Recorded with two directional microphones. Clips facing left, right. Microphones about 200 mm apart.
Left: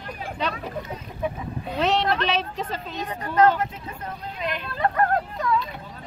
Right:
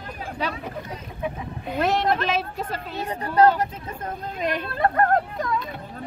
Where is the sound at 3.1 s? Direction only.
35° right (ahead or behind).